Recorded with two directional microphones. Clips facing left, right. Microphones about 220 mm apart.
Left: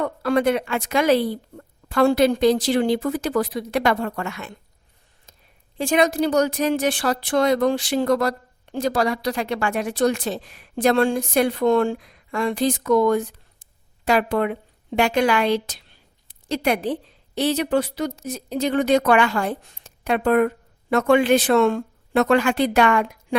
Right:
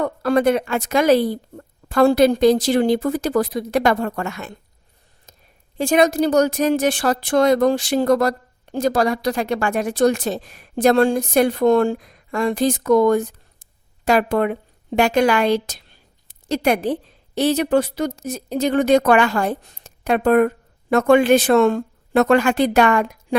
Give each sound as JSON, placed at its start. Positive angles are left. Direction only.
{"t": 0.0, "sound": "speech", "side_deg": -40}
{"t": 5.7, "sound": "speech", "side_deg": -45}